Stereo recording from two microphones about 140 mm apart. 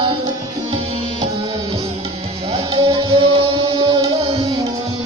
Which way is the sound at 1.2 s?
25° right (ahead or behind).